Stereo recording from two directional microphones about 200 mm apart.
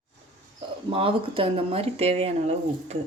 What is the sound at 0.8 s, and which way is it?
Speech, 25° right (ahead or behind).